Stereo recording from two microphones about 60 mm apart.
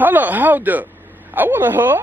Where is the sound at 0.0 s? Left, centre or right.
Right.